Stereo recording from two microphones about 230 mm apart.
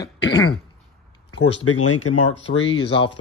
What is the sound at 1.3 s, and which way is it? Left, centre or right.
Speech, left.